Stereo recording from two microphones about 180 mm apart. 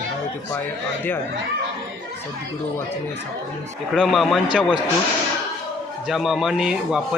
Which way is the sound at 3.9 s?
Centre (ahead or behind).